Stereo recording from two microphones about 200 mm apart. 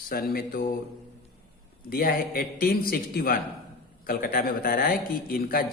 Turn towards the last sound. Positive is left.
turn(degrees=50)  # may be behind; listen again after turning